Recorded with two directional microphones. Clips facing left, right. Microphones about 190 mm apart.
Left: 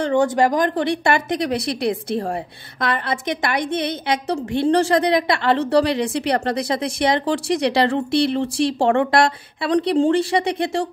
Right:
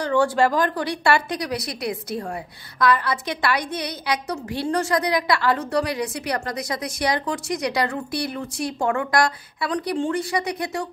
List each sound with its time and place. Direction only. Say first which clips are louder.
0.0 s a woman's voice: left 2 dB; 20° left (ahead or behind)